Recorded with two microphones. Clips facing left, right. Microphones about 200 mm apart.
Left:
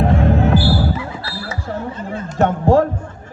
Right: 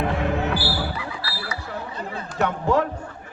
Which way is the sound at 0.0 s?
40° left (ahead or behind).